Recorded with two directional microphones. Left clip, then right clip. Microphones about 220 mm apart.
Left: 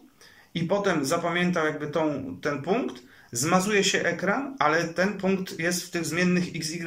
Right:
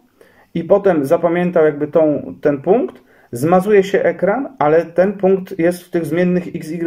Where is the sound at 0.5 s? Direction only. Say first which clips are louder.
Right 12 dB; 25° right (ahead or behind).